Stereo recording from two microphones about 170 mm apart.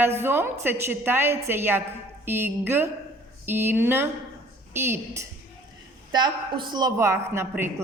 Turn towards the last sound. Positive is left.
turn(degrees=-10)  # may be behind; listen again after turning